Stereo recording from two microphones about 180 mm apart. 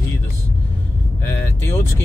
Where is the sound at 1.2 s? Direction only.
15° left (ahead or behind).